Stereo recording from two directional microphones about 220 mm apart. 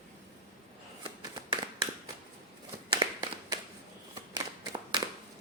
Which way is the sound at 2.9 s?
20° right (ahead or behind).